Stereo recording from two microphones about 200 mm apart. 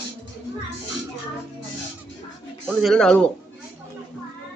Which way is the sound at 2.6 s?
Centre (ahead or behind).